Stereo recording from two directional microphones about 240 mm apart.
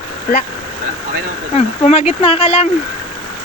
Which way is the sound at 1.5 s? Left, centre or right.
Left.